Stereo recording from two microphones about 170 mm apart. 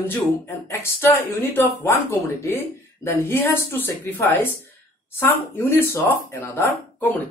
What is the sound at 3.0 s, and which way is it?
Speech, 15° left (ahead or behind).